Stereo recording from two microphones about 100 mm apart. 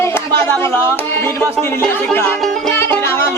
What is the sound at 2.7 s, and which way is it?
Music, 25° left (ahead or behind).